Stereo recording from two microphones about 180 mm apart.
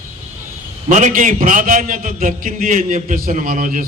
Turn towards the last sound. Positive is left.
turn(degrees=-50)  # may be behind; listen again after turning